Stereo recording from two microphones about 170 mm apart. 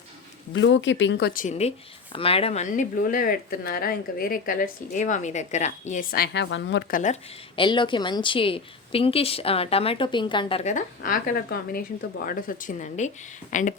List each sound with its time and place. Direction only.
0.5 s speech: 90° left
1.3 s speech: 50° left (ahead or behind); by 6.8 s 90° left
6.9 s speech: 45° left (ahead or behind)
7.5 s a woman's voice: 30° left (ahead or behind)
10.6 s speech: 45° left (ahead or behind)